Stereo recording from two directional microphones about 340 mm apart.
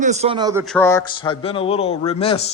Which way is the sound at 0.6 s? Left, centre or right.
Centre.